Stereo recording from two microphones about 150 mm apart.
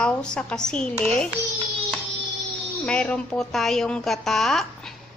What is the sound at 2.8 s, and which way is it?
A woman's voice, 5° left (ahead or behind).